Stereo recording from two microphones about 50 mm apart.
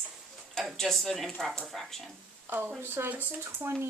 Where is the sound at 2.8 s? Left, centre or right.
Right.